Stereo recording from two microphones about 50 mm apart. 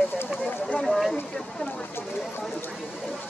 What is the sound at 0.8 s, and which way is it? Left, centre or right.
Speech, centre.